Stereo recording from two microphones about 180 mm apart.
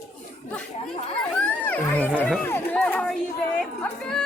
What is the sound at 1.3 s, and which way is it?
A woman's voice, 10° left (ahead or behind).